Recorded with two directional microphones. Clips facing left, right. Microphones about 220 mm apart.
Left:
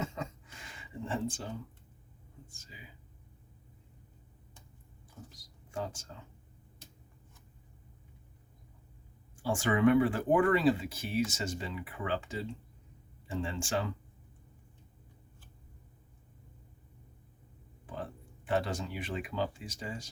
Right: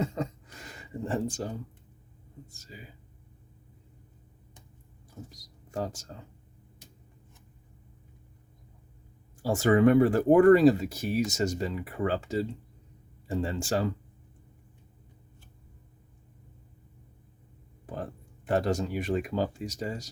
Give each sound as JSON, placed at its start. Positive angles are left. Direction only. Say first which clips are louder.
{"t": 0.0, "sound": "a sound", "louder": "right 7 dB", "side_deg": -35}
{"t": 2.5, "sound": "speech", "louder": "right 7 dB", "side_deg": -40}
{"t": 5.3, "sound": "speech", "louder": "right 4 dB", "side_deg": -40}
{"t": 9.4, "sound": "speech", "louder": "right 5 dB", "side_deg": -40}
{"t": 17.8, "sound": "speech", "louder": "right 4 dB", "side_deg": -45}